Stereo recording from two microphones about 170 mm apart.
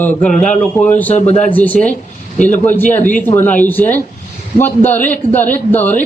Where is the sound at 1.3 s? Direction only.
40° left (ahead or behind).